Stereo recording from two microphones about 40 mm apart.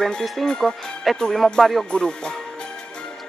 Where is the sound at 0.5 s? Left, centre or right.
Centre.